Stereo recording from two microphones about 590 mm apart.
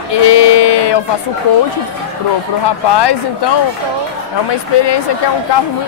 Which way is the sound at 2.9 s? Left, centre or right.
Left.